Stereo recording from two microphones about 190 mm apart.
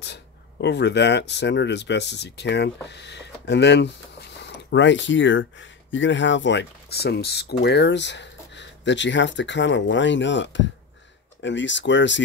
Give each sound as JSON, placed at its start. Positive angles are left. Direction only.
{"t": 0.0, "sound": "speech", "side_deg": 65}